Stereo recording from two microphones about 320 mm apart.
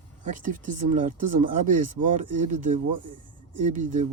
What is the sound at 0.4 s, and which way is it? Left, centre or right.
Speech, right.